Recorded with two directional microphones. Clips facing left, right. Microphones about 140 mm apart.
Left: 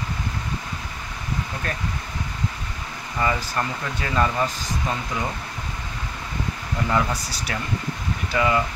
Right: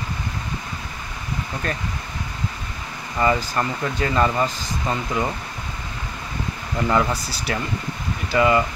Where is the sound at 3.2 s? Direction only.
Centre (ahead or behind).